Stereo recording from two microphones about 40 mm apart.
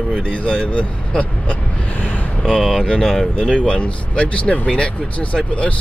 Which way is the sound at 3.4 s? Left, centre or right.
Left.